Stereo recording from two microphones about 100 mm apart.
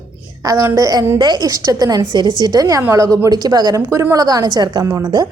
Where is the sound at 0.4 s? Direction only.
30° right (ahead or behind).